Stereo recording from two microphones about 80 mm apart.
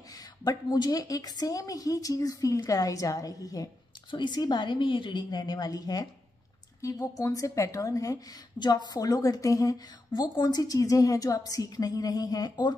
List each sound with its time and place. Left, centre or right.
0.4 s a woman's voice: left
4.1 s a woman's voice: left
8.5 s a woman's voice: left